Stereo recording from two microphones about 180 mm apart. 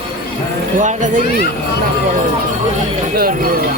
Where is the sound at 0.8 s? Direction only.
45° right (ahead or behind).